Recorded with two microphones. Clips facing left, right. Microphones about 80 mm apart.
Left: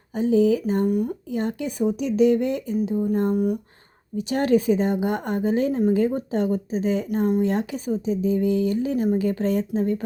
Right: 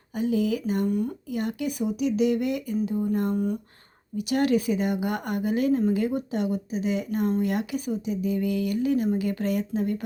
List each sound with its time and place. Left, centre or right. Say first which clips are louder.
0.1 s speech: left 6 dB; left
0.9 s speech: left 3 dB; centre
4.2 s speech: left 3 dB; left